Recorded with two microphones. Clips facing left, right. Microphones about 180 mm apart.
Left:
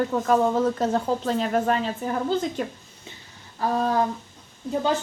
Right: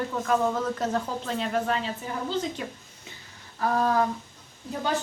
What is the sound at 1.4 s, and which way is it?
A woman's voice, 45° left (ahead or behind).